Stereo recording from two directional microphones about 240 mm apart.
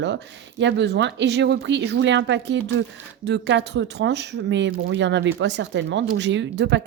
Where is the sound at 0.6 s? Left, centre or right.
Right.